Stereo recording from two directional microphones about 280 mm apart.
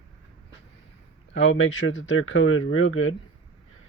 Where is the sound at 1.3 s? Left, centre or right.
Left.